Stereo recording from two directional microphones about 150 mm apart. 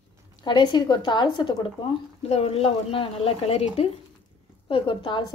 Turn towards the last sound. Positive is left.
turn(degrees=35)  # may be behind; listen again after turning